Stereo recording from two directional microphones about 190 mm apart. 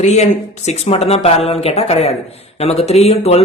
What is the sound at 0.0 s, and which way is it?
A man's voice, 35° left (ahead or behind).